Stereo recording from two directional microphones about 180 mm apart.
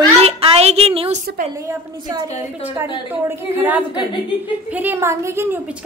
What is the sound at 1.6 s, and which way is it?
Speech, 20° right (ahead or behind).